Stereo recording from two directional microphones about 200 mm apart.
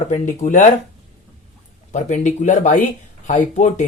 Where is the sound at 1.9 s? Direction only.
35° left (ahead or behind).